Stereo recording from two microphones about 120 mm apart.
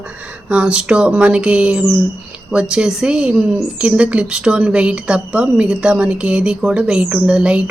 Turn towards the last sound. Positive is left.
turn(degrees=-10)  # may be behind; listen again after turning